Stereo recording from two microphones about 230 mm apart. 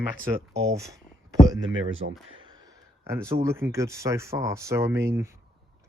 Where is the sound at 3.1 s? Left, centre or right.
Centre.